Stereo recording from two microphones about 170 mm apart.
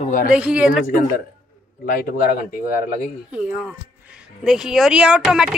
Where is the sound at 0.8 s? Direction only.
55° left (ahead or behind).